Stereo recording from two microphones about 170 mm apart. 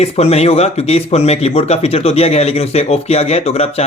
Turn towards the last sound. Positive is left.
turn(degrees=35)  # may be behind; listen again after turning